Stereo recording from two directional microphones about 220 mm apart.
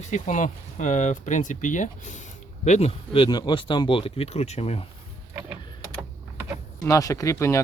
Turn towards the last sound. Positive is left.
turn(degrees=15)  # may be behind; listen again after turning